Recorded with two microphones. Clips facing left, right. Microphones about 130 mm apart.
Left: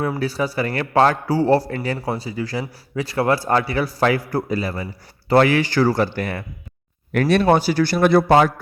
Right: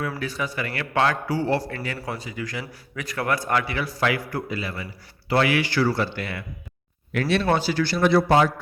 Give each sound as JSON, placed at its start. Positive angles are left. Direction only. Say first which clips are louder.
{"t": 0.0, "sound": "a man's voice", "louder": "left 6 dB", "side_deg": 30}
{"t": 7.7, "sound": "a man's voice", "louder": "left 5 dB", "side_deg": 40}
{"t": 7.9, "sound": "a man's voice", "louder": "left 4 dB", "side_deg": 55}